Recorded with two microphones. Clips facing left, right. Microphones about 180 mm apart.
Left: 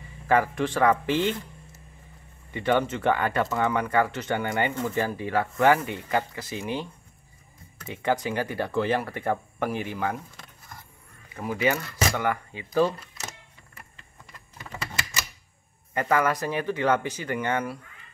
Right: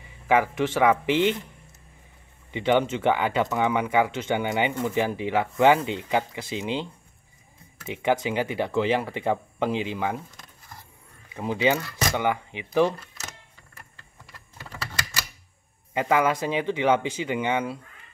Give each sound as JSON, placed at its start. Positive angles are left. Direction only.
{"t": 0.3, "sound": "speech", "side_deg": -10}
{"t": 2.5, "sound": "speech", "side_deg": -20}
{"t": 7.9, "sound": "speech", "side_deg": -15}
{"t": 11.3, "sound": "speech", "side_deg": -20}
{"t": 15.9, "sound": "speech", "side_deg": -15}